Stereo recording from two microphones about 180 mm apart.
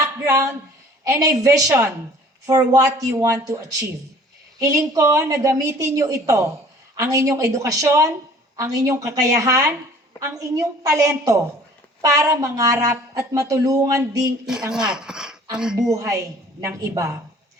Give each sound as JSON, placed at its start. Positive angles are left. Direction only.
{"t": 0.0, "sound": "a woman's voice", "side_deg": -20}
{"t": 14.7, "sound": "speech", "side_deg": -5}
{"t": 15.9, "sound": "a woman's voice", "side_deg": -20}